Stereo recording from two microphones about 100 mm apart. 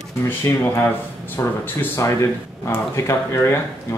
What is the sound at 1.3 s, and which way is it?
Speech, 25° left (ahead or behind).